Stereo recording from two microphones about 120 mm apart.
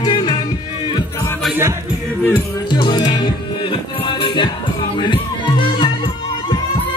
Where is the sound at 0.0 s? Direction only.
35° left (ahead or behind).